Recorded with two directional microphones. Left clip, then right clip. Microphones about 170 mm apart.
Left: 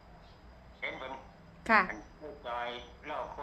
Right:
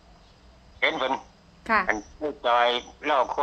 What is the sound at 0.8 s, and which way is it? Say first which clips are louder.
Speech: right 15 dB; 80° right.